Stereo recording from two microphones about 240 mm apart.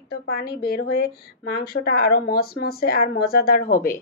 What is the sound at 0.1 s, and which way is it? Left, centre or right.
A woman's voice, left.